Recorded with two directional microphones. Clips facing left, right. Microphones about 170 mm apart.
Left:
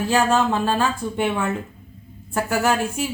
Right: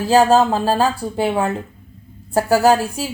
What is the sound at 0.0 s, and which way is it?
A woman's voice, 35° right (ahead or behind).